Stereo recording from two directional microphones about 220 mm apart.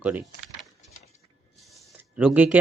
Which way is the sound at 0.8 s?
30° left (ahead or behind).